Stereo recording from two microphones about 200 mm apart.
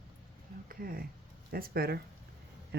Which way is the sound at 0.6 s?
45° right (ahead or behind).